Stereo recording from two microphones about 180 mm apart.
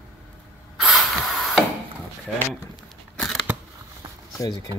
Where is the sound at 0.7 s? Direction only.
Centre (ahead or behind).